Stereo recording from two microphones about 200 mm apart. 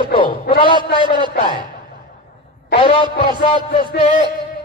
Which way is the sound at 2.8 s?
25° left (ahead or behind).